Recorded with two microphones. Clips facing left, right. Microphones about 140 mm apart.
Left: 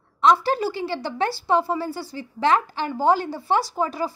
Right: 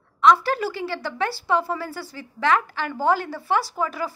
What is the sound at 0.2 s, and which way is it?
A woman's voice, 25° left (ahead or behind).